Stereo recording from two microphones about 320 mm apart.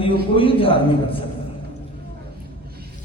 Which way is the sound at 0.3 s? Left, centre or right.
Centre.